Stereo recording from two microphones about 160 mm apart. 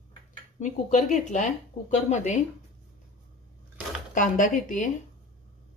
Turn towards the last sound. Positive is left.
turn(degrees=50)  # may be behind; listen again after turning